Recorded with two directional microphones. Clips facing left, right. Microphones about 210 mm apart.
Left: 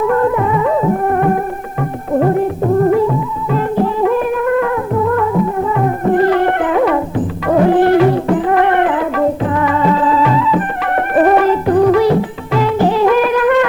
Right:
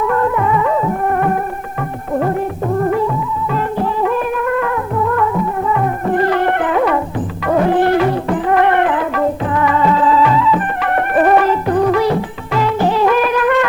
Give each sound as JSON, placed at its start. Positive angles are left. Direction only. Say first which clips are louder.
{"t": 0.1, "sound": "music", "louder": "left 2 dB", "side_deg": 30}
{"t": 3.5, "sound": "music", "louder": "left 5 dB", "side_deg": 30}